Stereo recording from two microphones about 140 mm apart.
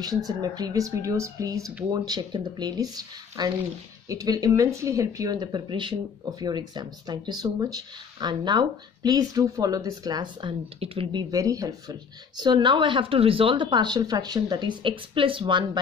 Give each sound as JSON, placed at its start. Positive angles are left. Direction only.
{"t": 0.0, "sound": "speech", "side_deg": -25}
{"t": 10.8, "sound": "speech", "side_deg": -35}